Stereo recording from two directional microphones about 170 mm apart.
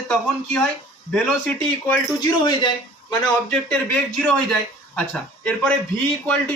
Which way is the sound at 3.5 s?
5° left (ahead or behind).